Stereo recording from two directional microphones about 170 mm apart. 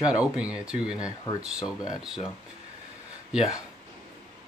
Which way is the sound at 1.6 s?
20° left (ahead or behind).